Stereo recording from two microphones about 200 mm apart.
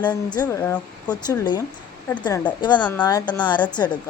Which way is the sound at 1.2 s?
20° left (ahead or behind).